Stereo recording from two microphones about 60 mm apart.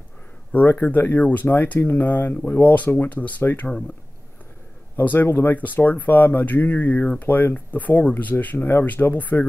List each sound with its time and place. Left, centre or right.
0.5 s speech: left
4.9 s speech: left